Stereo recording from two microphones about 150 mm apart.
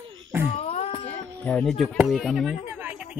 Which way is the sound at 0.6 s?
40° left (ahead or behind).